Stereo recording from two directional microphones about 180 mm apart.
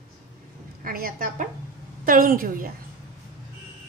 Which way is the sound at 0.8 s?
50° right (ahead or behind).